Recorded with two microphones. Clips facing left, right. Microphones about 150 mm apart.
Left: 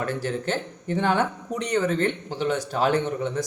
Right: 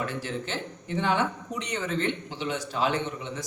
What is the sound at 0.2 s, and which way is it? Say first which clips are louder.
Speech: left 6 dB; 45° left (ahead or behind).